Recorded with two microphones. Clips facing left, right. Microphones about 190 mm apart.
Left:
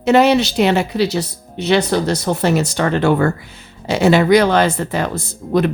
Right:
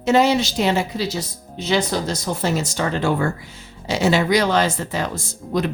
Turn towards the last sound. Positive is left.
turn(degrees=60)  # may be behind; listen again after turning